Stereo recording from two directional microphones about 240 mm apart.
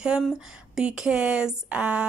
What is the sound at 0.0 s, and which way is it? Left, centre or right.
A woman's voice, centre.